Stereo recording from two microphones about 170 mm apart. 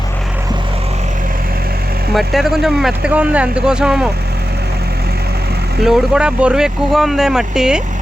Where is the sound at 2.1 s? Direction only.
Centre (ahead or behind).